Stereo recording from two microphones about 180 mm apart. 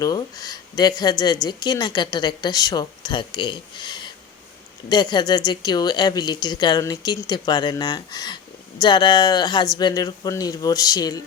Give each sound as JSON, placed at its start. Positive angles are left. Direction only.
{"t": 0.0, "sound": "speech", "side_deg": 20}